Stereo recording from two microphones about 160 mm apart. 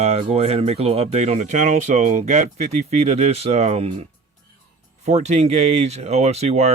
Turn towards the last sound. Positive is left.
turn(degrees=-40)  # may be behind; listen again after turning